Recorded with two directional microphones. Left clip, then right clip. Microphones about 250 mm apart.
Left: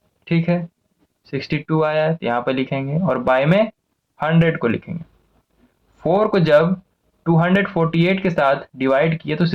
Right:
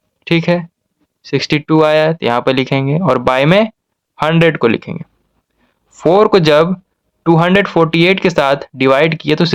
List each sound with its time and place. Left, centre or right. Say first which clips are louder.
0.3 s speech: right 8 dB; right